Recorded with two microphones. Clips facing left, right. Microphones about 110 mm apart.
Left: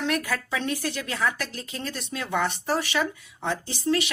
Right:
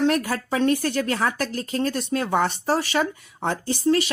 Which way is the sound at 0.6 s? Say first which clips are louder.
Right 8 dB; 50° right (ahead or behind).